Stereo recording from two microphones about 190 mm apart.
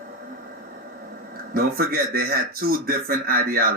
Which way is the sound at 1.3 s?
50° right (ahead or behind).